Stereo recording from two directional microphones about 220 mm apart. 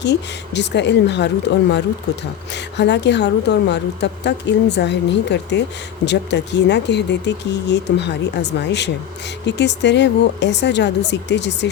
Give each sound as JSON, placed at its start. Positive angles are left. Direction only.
{"t": 0.0, "sound": "speech", "side_deg": 50}
{"t": 2.5, "sound": "speech", "side_deg": 50}